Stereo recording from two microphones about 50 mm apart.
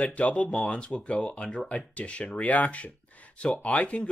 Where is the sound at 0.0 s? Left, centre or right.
Left.